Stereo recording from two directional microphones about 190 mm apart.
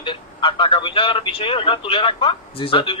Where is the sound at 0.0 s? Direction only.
25° left (ahead or behind).